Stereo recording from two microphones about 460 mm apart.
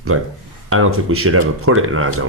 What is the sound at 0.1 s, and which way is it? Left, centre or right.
A man's voice, right.